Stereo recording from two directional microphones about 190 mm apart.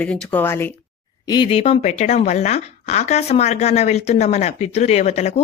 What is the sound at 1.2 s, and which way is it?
A woman's voice, 25° left (ahead or behind).